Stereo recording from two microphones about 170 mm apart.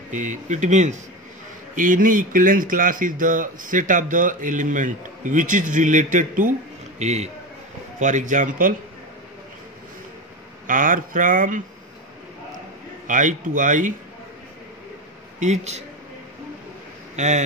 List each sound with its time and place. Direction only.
0.2 s a man's voice: 45° right (ahead or behind)
10.7 s speech: 50° right (ahead or behind)
13.0 s speech: 50° right (ahead or behind)
15.4 s speech: 40° right (ahead or behind)
17.1 s speech: 45° right (ahead or behind)